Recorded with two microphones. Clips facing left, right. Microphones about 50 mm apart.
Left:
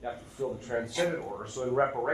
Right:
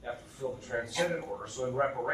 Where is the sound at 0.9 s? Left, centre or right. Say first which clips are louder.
Even; left.